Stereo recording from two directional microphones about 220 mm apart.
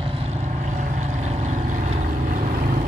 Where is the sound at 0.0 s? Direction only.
25° right (ahead or behind).